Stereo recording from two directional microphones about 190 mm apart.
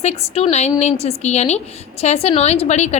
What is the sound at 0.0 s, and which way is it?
A woman's voice, 35° left (ahead or behind).